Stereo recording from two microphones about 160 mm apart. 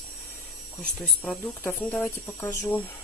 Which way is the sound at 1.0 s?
5° left (ahead or behind).